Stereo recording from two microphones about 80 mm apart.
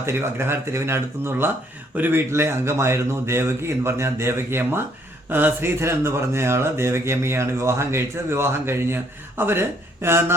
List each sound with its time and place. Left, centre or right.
0.0 s speech: right